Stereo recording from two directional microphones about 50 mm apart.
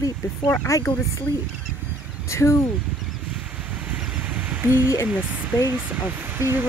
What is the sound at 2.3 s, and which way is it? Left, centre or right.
Speech, left.